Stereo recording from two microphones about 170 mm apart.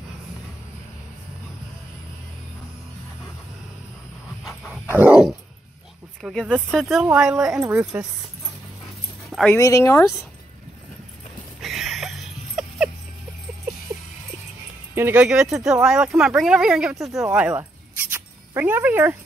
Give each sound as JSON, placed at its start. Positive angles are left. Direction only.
{"t": 4.9, "sound": "dog", "side_deg": -10}
{"t": 6.2, "sound": "speech", "side_deg": 0}
{"t": 9.3, "sound": "speech", "side_deg": 5}
{"t": 9.6, "sound": "speech", "side_deg": 20}
{"t": 11.6, "sound": "a sound", "side_deg": 0}
{"t": 15.0, "sound": "speech", "side_deg": -10}
{"t": 18.1, "sound": "music", "side_deg": -15}